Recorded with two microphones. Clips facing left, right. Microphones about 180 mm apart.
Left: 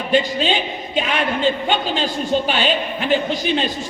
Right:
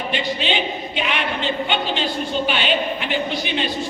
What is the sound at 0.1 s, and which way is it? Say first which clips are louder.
Speech: left 7 dB; 40° left (ahead or behind).